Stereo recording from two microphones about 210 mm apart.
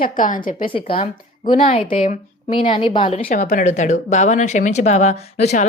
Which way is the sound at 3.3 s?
40° left (ahead or behind).